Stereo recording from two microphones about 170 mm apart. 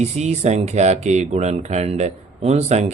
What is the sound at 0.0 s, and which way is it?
Speech, 40° right (ahead or behind).